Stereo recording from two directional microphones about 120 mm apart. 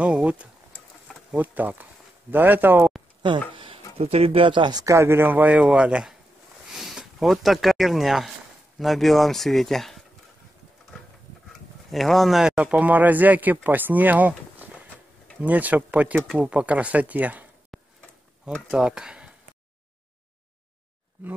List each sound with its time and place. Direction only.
0.0 s a man's voice: 10° right (ahead or behind)
3.2 s a sound: 45° right (ahead or behind)
4.0 s speech: 60° right (ahead or behind); by 10.0 s centre (ahead or behind)
11.9 s a man's voice: centre (ahead or behind)
17.7 s a sound: centre (ahead or behind)
18.7 s speech: 5° right (ahead or behind)